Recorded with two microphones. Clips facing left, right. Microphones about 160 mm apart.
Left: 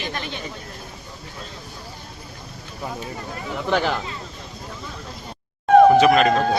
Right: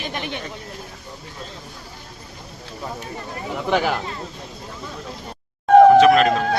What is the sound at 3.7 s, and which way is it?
Speech, 10° right (ahead or behind).